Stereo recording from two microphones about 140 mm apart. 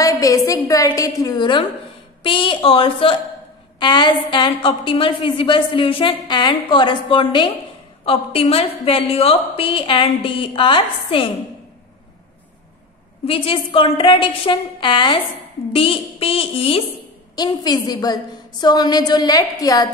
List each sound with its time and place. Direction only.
0.0 s a woman's voice: 25° left (ahead or behind); by 11.2 s 40° left (ahead or behind)
13.2 s a woman's voice: 40° left (ahead or behind)
17.4 s a woman's voice: 30° left (ahead or behind)